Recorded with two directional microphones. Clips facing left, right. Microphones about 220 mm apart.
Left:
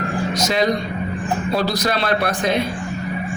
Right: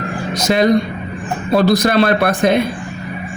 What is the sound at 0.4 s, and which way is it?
A man's voice, 55° right (ahead or behind).